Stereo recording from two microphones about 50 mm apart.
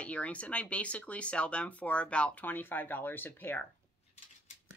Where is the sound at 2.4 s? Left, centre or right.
Left.